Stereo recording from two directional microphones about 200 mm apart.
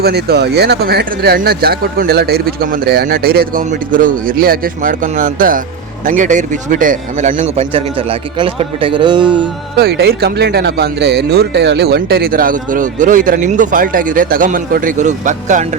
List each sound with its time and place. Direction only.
0.0 s a man's voice: 55° right (ahead or behind); by 9.5 s 25° right (ahead or behind)
9.7 s speech: 50° right (ahead or behind)